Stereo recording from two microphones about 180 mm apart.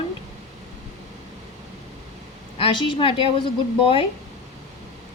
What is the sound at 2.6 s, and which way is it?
Speech, 30° left (ahead or behind).